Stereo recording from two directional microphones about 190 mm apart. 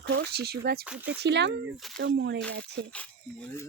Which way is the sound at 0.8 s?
5° right (ahead or behind).